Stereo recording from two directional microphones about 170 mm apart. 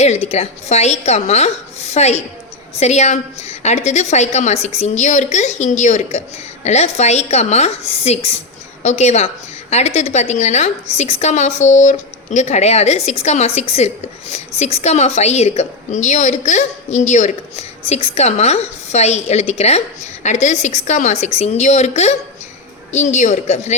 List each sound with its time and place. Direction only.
0.0 s a woman's voice: 40° left (ahead or behind)